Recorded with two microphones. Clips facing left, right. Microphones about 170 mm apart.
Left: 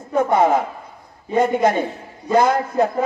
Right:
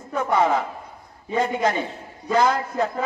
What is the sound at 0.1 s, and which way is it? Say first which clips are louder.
A man's voice: left 5 dB; 45° left (ahead or behind).